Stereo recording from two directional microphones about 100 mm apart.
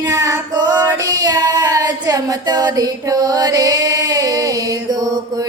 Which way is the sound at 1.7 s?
40° right (ahead or behind).